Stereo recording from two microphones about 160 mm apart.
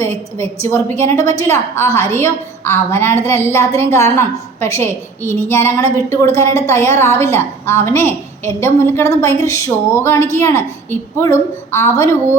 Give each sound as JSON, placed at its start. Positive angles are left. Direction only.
{"t": 0.0, "sound": "a woman's voice", "side_deg": 15}